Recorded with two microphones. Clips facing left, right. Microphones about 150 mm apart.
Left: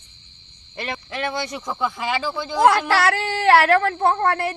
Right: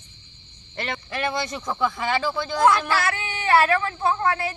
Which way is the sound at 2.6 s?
80° left.